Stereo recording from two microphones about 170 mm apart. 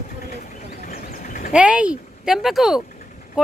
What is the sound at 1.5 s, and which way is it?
Speech, 5° right (ahead or behind).